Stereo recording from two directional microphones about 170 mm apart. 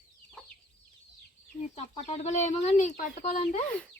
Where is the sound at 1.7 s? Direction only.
40° left (ahead or behind).